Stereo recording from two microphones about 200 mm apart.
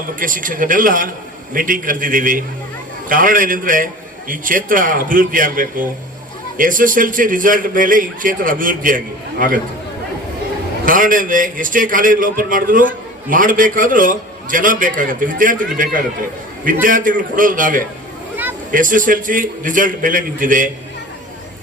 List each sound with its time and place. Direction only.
0.2 s a man's voice: 40° right (ahead or behind)
10.8 s a man's voice: 40° right (ahead or behind)